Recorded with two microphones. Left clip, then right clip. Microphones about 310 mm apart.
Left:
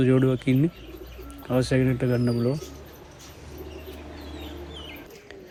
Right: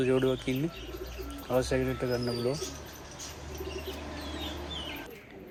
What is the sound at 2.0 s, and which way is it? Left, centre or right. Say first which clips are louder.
Speech: left 5 dB; left.